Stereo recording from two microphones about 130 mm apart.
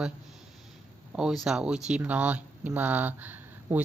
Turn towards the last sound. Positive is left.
turn(degrees=-15)  # may be behind; listen again after turning